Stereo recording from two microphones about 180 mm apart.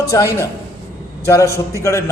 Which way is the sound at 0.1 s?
15° left (ahead or behind).